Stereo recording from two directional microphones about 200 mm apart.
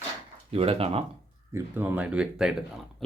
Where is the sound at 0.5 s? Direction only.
30° right (ahead or behind).